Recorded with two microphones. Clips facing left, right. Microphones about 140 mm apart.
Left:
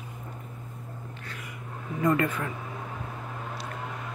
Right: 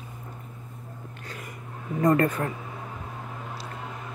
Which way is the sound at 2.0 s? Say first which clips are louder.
Right 3 dB; 40° right (ahead or behind).